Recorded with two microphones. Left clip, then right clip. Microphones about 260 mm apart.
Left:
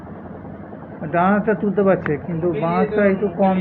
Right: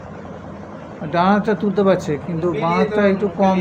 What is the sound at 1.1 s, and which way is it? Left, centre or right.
Speech, centre.